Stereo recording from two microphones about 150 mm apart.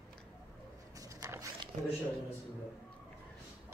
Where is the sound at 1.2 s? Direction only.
20° right (ahead or behind).